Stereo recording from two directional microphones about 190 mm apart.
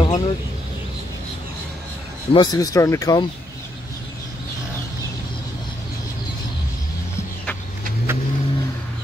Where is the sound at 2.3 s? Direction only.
20° left (ahead or behind).